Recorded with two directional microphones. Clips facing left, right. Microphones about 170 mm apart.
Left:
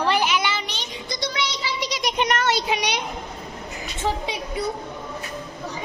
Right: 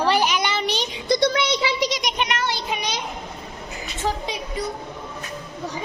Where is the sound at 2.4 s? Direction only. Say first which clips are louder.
Left 3 dB; 75° left (ahead or behind).